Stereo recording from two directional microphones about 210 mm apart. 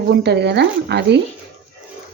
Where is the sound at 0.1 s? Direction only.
55° right (ahead or behind).